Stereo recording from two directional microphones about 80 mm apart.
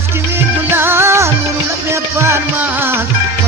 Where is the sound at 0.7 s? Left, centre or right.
Right.